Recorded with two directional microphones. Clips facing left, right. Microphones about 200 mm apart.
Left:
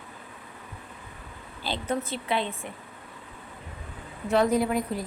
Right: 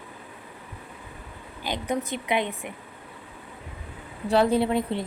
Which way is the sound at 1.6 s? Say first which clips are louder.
Right 1 dB; 15° right (ahead or behind).